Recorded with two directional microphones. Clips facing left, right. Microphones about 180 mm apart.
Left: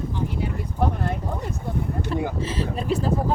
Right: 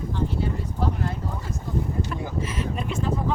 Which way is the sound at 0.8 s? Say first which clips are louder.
Left 4 dB; 65° left (ahead or behind).